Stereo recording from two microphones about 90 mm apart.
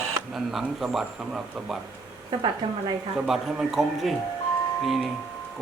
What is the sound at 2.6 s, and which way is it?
Speech, 65° right (ahead or behind).